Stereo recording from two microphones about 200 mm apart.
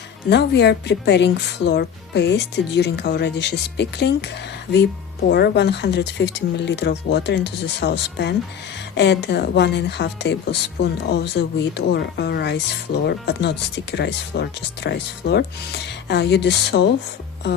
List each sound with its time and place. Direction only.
0.3 s speech: 55° left (ahead or behind)
5.3 s speech: 55° left (ahead or behind)